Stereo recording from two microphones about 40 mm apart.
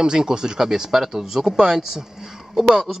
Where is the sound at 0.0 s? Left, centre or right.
Centre.